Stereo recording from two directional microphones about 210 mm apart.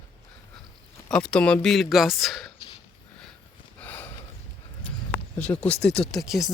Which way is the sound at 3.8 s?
10° left (ahead or behind).